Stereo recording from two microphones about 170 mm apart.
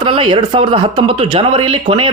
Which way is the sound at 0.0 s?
30° right (ahead or behind).